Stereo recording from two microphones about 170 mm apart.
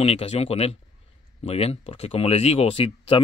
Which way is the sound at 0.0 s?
40° left (ahead or behind).